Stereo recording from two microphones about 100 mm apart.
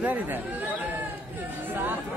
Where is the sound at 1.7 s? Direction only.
20° right (ahead or behind).